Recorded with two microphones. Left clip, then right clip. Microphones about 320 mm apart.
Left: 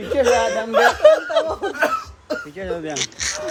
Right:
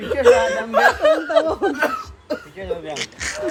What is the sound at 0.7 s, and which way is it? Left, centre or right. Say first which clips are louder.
Snicker: left 3 dB; centre.